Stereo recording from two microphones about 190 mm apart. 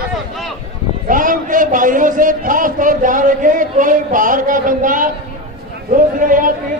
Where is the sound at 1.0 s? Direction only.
45° right (ahead or behind).